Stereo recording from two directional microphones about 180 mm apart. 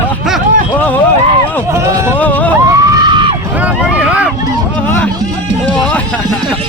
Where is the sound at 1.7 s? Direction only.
15° right (ahead or behind).